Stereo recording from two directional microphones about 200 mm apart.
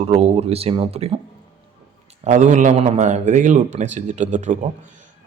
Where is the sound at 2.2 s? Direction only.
40° right (ahead or behind).